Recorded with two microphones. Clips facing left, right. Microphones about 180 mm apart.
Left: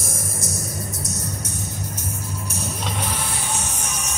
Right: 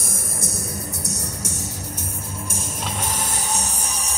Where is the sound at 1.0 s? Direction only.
80° right.